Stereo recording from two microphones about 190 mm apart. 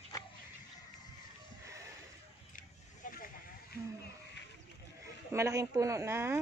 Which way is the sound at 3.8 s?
15° right (ahead or behind).